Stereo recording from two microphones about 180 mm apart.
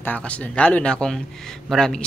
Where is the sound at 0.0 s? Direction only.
10° left (ahead or behind).